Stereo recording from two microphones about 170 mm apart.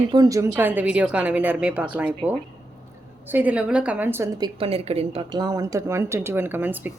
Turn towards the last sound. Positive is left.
turn(degrees=-10)  # may be behind; listen again after turning